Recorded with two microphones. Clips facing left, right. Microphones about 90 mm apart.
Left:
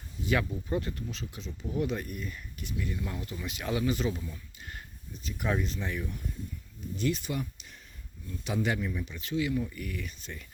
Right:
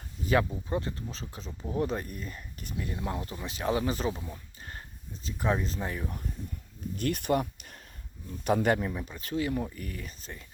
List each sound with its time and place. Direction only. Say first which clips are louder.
0.3 s speech: right 3 dB; 30° right (ahead or behind)
6.9 s speech: right 3 dB; 55° right (ahead or behind); by 10.4 s 35° right (ahead or behind)